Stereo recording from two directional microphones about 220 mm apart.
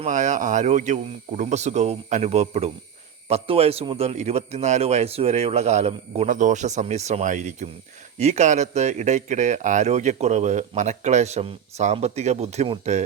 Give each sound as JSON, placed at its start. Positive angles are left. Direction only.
{"t": 0.0, "sound": "speech", "side_deg": -35}